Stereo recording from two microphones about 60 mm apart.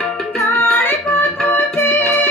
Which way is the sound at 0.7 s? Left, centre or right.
Left.